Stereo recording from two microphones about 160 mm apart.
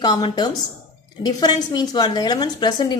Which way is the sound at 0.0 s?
25° left (ahead or behind).